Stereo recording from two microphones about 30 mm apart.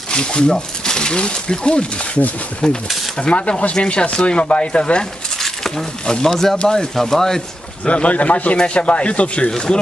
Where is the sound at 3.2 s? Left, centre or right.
Left.